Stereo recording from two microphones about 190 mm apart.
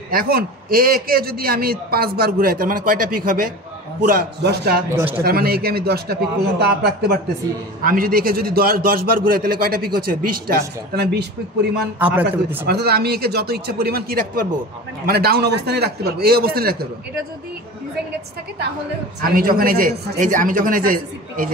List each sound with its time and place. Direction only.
0.1 s a man's voice: 50° right (ahead or behind)
4.9 s a man's voice: 10° right (ahead or behind)
5.2 s a man's voice: 55° right (ahead or behind)
12.0 s a man's voice: 10° right (ahead or behind)
12.6 s a man's voice: 55° right (ahead or behind)
19.3 s a man's voice: 50° right (ahead or behind)